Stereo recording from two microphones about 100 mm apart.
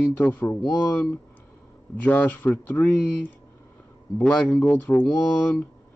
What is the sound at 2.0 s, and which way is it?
Speech, 20° left (ahead or behind).